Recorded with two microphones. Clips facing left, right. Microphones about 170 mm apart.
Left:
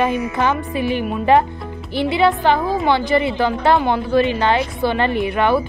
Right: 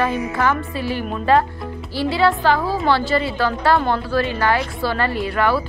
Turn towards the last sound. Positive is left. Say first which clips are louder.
# left 3 dB
turn(degrees=20)  # may be behind; listen again after turning